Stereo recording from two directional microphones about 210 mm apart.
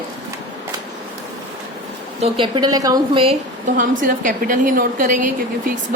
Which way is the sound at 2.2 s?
25° right (ahead or behind).